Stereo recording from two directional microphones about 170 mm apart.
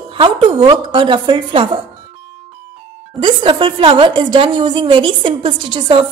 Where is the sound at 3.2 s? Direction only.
30° right (ahead or behind).